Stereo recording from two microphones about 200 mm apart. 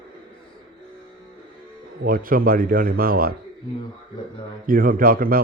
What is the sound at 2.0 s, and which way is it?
A man's voice, 45° right (ahead or behind).